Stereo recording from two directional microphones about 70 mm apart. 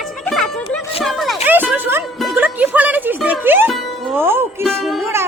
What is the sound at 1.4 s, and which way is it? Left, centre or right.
Music, right.